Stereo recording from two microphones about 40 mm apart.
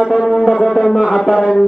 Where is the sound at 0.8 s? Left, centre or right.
Centre.